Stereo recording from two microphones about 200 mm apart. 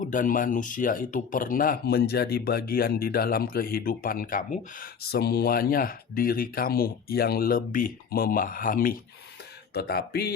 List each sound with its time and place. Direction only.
0.0 s speech: 40° left (ahead or behind)